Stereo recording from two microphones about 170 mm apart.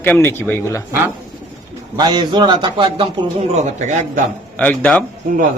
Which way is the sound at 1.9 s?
25° right (ahead or behind).